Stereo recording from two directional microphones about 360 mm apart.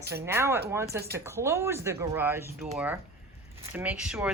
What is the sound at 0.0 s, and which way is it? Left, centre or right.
Speech, right.